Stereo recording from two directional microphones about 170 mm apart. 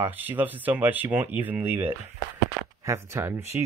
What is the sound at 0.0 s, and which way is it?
Speech, 10° right (ahead or behind).